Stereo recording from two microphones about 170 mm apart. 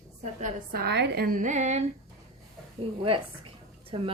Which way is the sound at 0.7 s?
70° right (ahead or behind).